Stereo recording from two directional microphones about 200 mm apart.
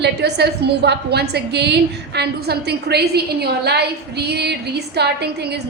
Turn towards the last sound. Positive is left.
turn(degrees=-55)  # may be behind; listen again after turning